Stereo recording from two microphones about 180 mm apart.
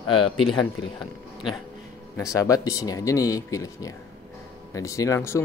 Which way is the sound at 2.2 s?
20° left (ahead or behind).